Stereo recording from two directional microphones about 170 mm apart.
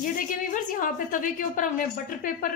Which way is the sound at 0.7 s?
50° left (ahead or behind).